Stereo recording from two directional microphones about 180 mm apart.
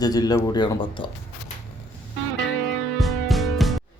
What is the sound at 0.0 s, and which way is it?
Speech, 20° left (ahead or behind).